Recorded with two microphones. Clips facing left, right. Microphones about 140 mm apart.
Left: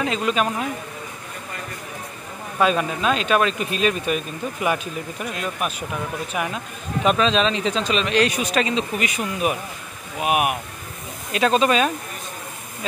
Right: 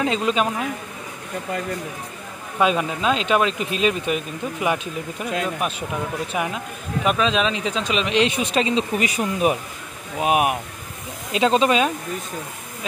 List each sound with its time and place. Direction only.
0.0 s speech: 25° right (ahead or behind)
2.6 s speech: 15° right (ahead or behind)
6.3 s speech: 20° right (ahead or behind)
7.1 s speech: 10° right (ahead or behind)